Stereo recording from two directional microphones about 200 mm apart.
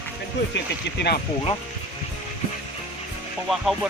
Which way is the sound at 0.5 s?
55° left (ahead or behind).